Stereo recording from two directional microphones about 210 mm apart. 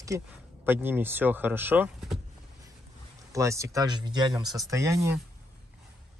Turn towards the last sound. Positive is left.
turn(degrees=-15)  # may be behind; listen again after turning